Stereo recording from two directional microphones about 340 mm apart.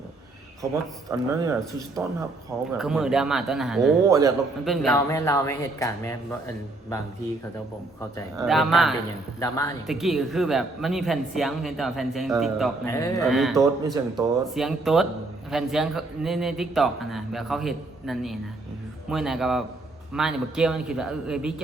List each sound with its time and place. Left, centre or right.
0.6 s speech: centre
2.7 s speech: centre
8.4 s a man's voice: centre